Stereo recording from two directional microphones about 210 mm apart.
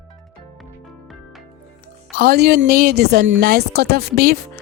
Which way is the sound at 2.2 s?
50° right (ahead or behind).